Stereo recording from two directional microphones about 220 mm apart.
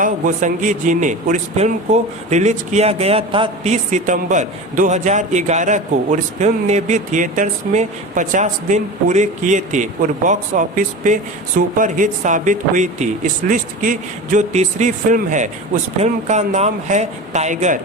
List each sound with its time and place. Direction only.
0.0 s a man's voice: 35° right (ahead or behind)